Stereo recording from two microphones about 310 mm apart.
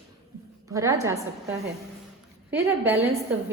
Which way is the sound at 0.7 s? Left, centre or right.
Centre.